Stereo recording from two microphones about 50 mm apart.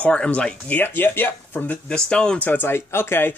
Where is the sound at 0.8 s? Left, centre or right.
Left.